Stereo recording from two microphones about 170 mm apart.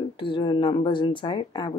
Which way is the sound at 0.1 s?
30° left (ahead or behind).